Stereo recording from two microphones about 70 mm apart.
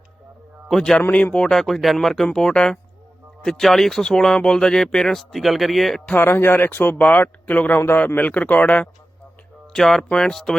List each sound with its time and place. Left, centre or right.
0.7 s speech: centre
1.1 s speech: centre
1.5 s speech: centre
6.1 s speech: left
9.7 s speech: centre